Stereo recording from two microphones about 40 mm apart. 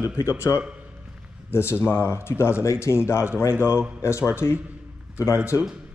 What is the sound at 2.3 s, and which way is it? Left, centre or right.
Speech, left.